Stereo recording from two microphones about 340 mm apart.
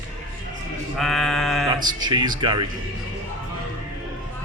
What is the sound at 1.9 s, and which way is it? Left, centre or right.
Speech, centre.